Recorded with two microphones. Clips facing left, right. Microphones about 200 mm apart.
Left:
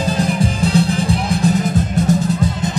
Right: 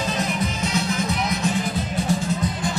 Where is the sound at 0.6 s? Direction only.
30° left (ahead or behind).